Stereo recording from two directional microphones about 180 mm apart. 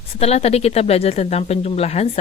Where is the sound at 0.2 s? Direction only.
35° left (ahead or behind).